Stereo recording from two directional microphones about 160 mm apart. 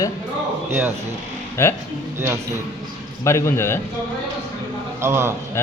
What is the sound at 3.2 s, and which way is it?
Speech, 15° left (ahead or behind).